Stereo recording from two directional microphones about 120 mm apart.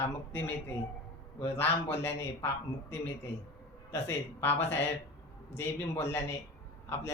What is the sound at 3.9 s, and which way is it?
A man's voice, 20° left (ahead or behind).